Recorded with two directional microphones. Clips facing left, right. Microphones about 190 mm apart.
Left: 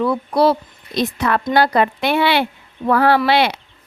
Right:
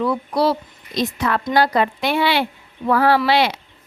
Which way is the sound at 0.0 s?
60° left (ahead or behind).